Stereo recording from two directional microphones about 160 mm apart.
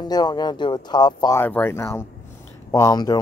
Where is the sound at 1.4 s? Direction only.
15° left (ahead or behind).